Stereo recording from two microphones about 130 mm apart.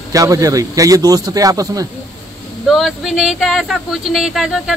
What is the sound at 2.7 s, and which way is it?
Speech, 5° right (ahead or behind).